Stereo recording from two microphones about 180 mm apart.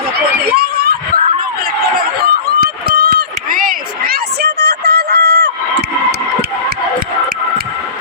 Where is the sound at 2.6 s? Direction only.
60° right (ahead or behind).